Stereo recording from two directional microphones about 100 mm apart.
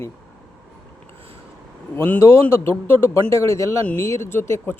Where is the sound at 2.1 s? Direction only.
25° left (ahead or behind).